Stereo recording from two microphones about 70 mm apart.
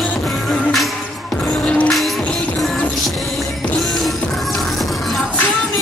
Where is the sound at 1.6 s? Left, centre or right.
Centre.